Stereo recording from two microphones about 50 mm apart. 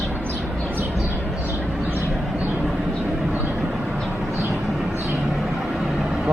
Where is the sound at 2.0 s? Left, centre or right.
Centre.